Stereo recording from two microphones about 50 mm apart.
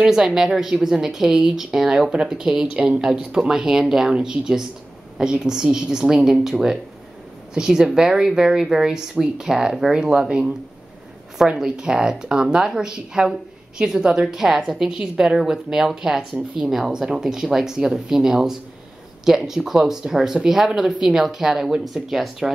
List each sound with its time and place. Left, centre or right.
0.0 s speech: centre